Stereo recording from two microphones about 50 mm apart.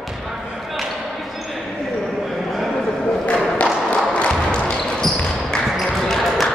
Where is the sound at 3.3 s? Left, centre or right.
Left.